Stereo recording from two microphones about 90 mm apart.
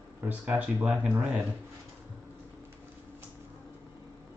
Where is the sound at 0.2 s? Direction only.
15° right (ahead or behind).